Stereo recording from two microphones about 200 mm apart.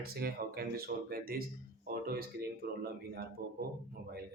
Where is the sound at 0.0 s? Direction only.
50° right (ahead or behind).